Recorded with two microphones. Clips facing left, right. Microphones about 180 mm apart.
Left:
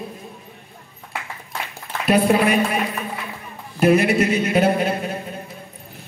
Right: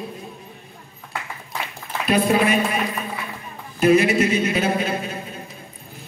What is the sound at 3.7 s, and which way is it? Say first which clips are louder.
A man's voice: even; 60° left (ahead or behind).